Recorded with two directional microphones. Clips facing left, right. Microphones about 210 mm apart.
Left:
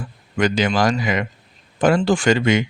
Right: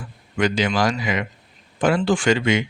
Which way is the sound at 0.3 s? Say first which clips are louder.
Left 2 dB; 45° left (ahead or behind).